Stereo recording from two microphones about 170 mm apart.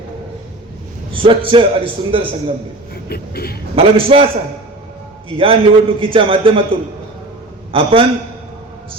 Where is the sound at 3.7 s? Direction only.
35° right (ahead or behind).